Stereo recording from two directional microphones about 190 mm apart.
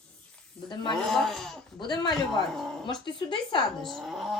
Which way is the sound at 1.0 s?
Centre (ahead or behind).